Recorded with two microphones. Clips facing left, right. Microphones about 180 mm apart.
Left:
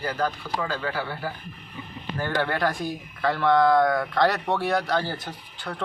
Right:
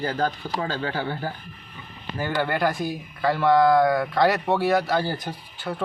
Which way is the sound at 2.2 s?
Centre (ahead or behind).